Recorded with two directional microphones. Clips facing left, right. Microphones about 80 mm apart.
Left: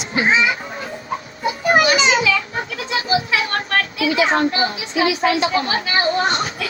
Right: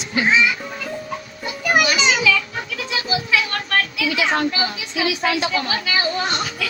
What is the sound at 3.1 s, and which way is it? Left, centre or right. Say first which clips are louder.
A woman's voice: left 2 dB; left.